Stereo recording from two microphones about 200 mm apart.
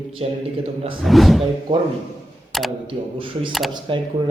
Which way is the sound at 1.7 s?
20° right (ahead or behind).